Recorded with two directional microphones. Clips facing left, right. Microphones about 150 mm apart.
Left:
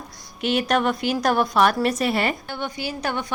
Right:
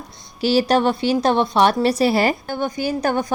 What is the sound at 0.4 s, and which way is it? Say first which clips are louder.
A woman's voice: right 5 dB; 30° right (ahead or behind).